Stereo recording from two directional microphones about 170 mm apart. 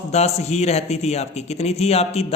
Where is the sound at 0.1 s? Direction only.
40° left (ahead or behind).